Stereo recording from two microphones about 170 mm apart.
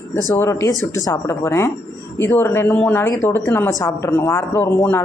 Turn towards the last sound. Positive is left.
turn(degrees=15)  # may be behind; listen again after turning